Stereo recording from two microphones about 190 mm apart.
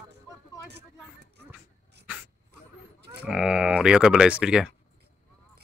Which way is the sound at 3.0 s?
60° right (ahead or behind).